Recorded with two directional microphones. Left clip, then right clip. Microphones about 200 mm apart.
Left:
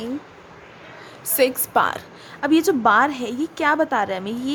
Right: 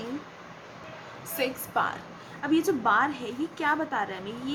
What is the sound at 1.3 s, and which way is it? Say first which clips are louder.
A woman's voice: left 10 dB; 50° left (ahead or behind).